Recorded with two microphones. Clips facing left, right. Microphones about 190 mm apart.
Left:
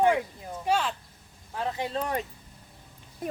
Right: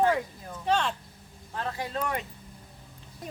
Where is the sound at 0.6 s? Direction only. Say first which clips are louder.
Even; 5° left (ahead or behind).